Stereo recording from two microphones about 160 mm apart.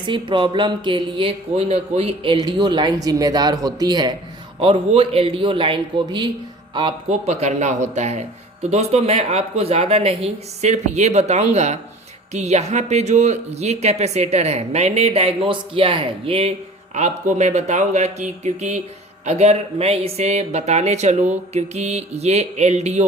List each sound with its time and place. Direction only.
0.0 s speech: 30° right (ahead or behind)
7.1 s speech: 45° right (ahead or behind)